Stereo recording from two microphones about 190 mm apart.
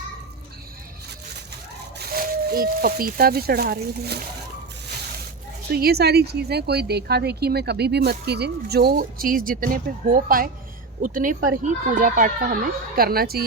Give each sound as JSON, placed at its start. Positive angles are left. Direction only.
{"t": 2.1, "sound": "speech", "side_deg": -50}
{"t": 5.7, "sound": "speech", "side_deg": -55}